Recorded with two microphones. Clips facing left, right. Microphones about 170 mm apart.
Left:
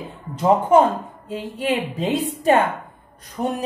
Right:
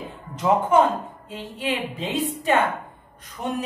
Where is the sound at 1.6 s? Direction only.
45° left (ahead or behind).